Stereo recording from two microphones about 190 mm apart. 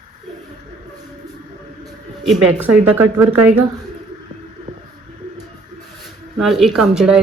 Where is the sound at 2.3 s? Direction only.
10° right (ahead or behind).